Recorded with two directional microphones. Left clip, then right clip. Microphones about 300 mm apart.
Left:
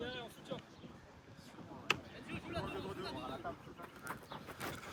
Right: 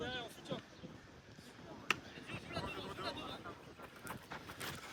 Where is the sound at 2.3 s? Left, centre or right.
Centre.